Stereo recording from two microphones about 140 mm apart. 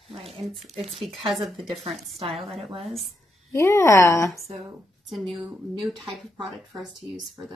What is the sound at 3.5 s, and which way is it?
Speech, 20° left (ahead or behind).